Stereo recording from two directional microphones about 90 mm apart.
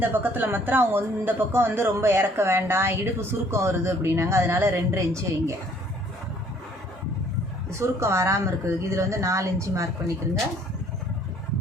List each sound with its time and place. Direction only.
0.0 s speech: 20° right (ahead or behind)
7.8 s speech: 30° right (ahead or behind)